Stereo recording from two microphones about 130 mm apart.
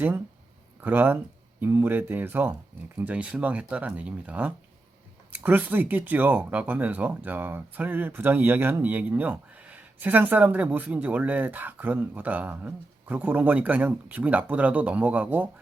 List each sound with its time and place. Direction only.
0.8 s speech: 15° right (ahead or behind)